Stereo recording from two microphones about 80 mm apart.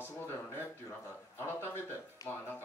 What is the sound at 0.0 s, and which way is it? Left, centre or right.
Speech, left.